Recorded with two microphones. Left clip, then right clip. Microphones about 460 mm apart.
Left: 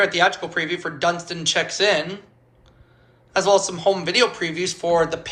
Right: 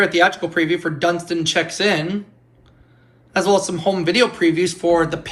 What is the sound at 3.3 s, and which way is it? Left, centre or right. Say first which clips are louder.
A man's voice: right 1 dB; centre.